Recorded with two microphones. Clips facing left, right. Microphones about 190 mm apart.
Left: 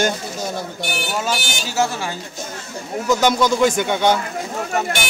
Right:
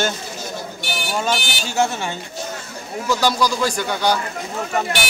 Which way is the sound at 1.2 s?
5° left (ahead or behind).